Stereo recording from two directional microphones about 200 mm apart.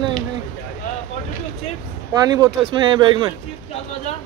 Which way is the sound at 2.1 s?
20° right (ahead or behind).